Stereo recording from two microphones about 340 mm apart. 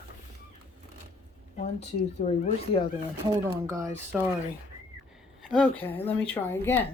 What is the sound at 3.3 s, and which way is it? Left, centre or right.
Speech, centre.